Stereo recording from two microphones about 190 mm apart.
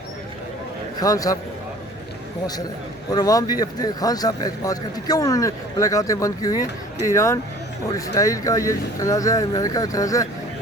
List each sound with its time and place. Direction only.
0.9 s speech: 20° left (ahead or behind)
3.1 s speech: 20° left (ahead or behind)